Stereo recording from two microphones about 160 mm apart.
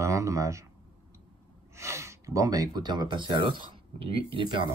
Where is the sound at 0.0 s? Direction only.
20° right (ahead or behind).